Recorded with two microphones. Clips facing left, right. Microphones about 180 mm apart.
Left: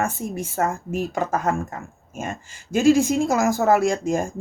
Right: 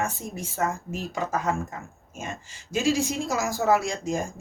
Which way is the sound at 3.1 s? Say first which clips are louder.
Left 8 dB; 55° left (ahead or behind).